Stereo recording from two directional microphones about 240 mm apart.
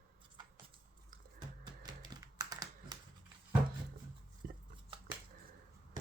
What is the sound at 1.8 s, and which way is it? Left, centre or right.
Typing, centre.